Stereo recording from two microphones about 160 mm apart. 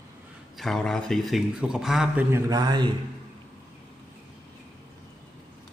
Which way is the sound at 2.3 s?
25° right (ahead or behind).